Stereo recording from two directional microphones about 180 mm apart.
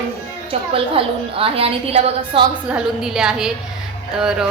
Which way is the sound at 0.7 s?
30° right (ahead or behind).